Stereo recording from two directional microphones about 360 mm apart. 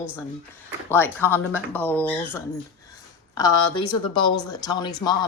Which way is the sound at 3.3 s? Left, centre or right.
Centre.